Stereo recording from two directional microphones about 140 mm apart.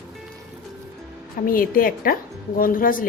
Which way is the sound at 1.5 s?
90° left.